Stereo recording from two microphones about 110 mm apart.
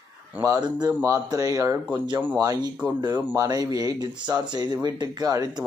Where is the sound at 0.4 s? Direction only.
35° right (ahead or behind).